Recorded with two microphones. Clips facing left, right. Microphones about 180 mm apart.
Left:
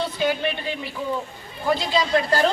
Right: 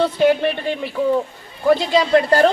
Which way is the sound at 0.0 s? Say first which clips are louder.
Right 8 dB; 60° right (ahead or behind).